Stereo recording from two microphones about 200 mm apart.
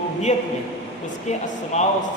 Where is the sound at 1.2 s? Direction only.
35° left (ahead or behind).